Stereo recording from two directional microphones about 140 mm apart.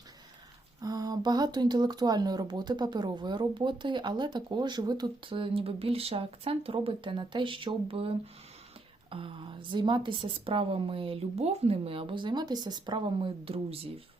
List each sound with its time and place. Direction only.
0.8 s speech: 25° right (ahead or behind); by 13.8 s 45° right (ahead or behind)